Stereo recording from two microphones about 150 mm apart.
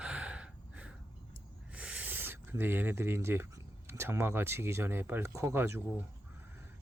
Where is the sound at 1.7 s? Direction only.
10° right (ahead or behind).